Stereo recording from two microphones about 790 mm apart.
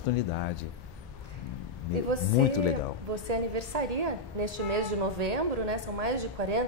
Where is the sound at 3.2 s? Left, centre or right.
Right.